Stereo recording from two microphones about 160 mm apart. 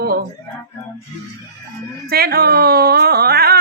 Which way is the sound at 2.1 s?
75° right (ahead or behind).